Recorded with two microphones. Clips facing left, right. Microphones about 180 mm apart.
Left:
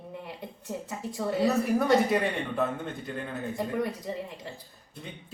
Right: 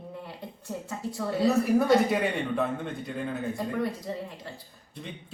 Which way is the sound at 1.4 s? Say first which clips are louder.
Right 3 dB; centre (ahead or behind).